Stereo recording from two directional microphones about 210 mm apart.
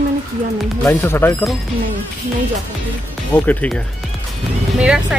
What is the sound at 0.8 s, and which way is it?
Speech, 10° left (ahead or behind).